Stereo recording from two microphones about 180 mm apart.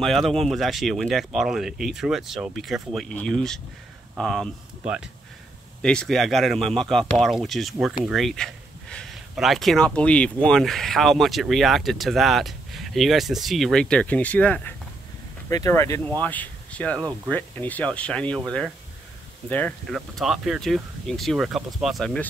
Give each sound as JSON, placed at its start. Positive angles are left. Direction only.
{"t": 0.0, "sound": "speech", "side_deg": 0}
{"t": 19.5, "sound": "speech", "side_deg": 5}